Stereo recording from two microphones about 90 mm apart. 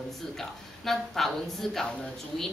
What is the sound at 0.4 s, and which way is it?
A woman's voice, 5° left (ahead or behind).